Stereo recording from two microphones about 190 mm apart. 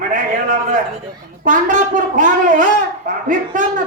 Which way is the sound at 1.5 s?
45° right (ahead or behind).